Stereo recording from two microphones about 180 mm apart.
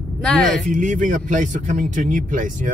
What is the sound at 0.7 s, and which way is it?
Speech, 45° right (ahead or behind).